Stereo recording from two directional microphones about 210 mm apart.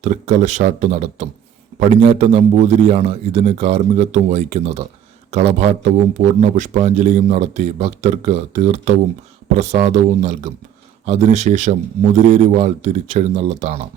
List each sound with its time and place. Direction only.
0.0 s a man's voice: 35° right (ahead or behind)